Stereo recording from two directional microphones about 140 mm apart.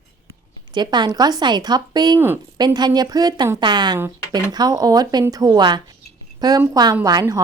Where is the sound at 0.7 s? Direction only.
30° right (ahead or behind).